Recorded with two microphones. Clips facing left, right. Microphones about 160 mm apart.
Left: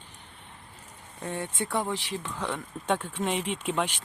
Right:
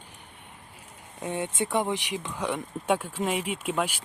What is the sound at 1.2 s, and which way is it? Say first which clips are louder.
Speech: right 3 dB; 15° right (ahead or behind).